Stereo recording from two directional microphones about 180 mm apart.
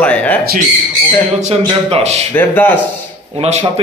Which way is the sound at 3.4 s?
35° right (ahead or behind).